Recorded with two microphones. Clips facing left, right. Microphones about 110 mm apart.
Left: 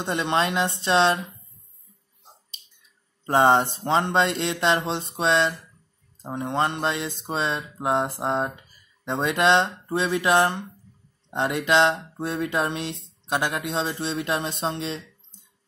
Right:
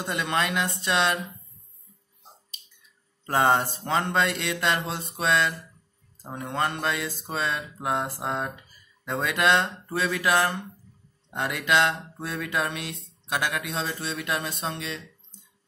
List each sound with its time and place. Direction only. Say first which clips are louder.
0.0 s speech: left 3 dB; 25° left (ahead or behind)
3.3 s speech: left 4 dB; 25° left (ahead or behind)